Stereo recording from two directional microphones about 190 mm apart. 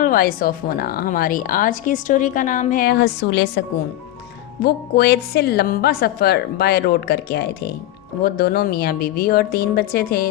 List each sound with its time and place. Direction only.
0.0 s a woman's voice: 50° left (ahead or behind); by 3.6 s 65° left (ahead or behind)
4.6 s a woman's voice: 60° left (ahead or behind)